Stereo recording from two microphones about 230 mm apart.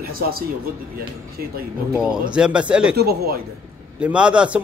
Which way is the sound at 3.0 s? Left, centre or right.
Right.